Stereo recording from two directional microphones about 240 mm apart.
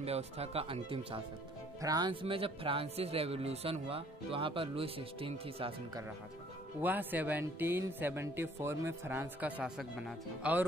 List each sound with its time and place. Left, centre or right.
0.0 s speech: right
6.8 s speech: centre